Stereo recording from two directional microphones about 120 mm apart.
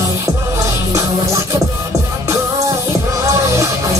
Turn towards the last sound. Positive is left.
turn(degrees=-25)  # may be behind; listen again after turning